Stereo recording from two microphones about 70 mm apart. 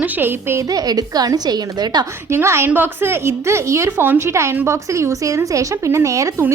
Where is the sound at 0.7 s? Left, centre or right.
Right.